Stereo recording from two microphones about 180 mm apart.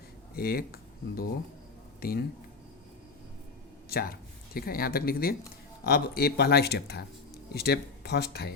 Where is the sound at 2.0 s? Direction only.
55° left (ahead or behind).